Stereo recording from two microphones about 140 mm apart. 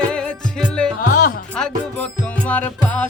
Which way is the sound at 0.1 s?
5° left (ahead or behind).